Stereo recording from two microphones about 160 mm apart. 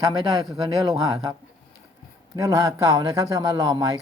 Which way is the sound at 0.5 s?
20° right (ahead or behind).